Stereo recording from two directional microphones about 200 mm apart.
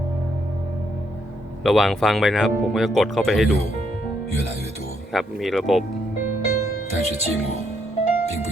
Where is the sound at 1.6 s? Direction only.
Centre (ahead or behind).